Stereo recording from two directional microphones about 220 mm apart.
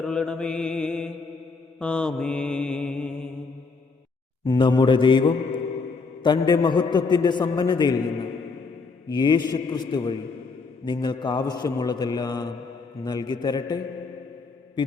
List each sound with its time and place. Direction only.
0.0 s mantra: 5° left (ahead or behind)
4.4 s a man's voice: 20° left (ahead or behind)
14.8 s mantra: 20° left (ahead or behind)